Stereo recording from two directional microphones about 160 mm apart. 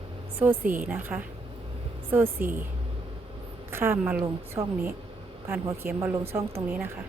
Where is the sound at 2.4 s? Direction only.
10° right (ahead or behind).